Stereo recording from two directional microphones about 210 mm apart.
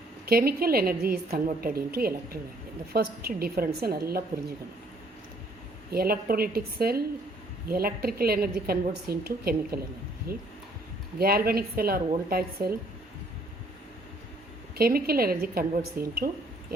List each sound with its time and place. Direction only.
0.3 s a woman's voice: 45° right (ahead or behind)
5.9 s a woman's voice: 45° right (ahead or behind)
14.8 s a woman's voice: 45° right (ahead or behind)